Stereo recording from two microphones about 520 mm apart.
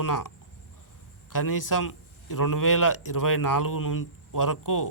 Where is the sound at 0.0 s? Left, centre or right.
Left.